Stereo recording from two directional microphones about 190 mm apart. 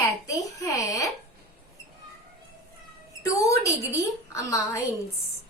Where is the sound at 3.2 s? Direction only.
15° left (ahead or behind).